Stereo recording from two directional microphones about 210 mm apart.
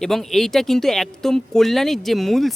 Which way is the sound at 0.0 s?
Centre (ahead or behind).